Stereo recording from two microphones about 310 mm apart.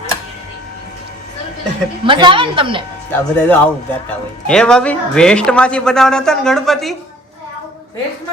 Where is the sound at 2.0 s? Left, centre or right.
Centre.